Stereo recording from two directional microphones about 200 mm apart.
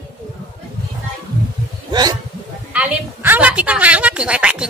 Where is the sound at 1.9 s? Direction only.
20° right (ahead or behind).